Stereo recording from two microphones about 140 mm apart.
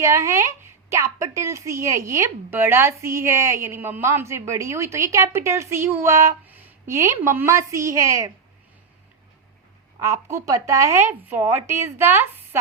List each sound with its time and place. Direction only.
0.0 s a woman's voice: 20° right (ahead or behind)
10.0 s speech: 20° right (ahead or behind)